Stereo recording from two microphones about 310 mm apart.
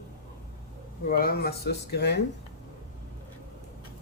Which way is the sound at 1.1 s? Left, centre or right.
Left.